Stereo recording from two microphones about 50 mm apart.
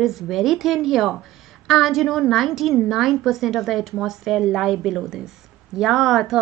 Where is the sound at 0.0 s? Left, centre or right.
Centre.